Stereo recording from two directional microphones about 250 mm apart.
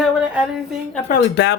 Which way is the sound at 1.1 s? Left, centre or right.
Left.